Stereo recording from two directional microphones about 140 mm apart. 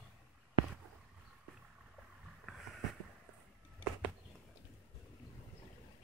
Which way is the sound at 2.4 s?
Centre (ahead or behind).